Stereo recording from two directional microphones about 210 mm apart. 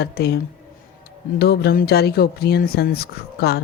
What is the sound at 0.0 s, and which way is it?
Speech, 50° left (ahead or behind).